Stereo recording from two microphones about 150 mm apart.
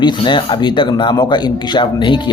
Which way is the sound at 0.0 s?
30° left (ahead or behind).